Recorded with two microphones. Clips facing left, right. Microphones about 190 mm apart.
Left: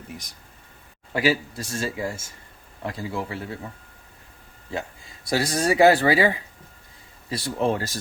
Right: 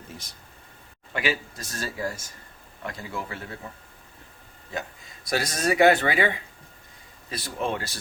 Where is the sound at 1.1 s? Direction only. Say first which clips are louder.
Left 6 dB; 35° left (ahead or behind).